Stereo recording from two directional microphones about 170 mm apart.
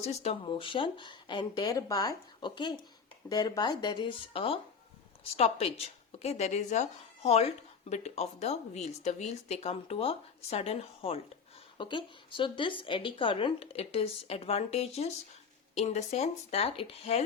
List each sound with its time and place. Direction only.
0.0 s speech: 40° left (ahead or behind)